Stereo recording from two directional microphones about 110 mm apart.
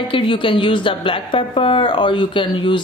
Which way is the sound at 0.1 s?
50° left (ahead or behind).